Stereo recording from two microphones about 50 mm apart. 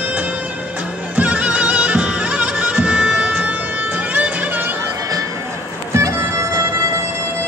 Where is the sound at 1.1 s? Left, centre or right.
Right.